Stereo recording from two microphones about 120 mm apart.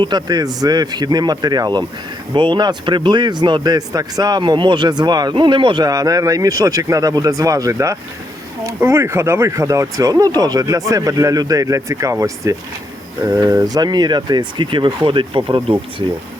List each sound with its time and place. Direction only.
0.0 s speech: 35° right (ahead or behind)